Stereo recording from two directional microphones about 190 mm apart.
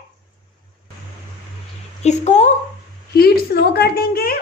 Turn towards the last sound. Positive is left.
turn(degrees=50)  # may be behind; listen again after turning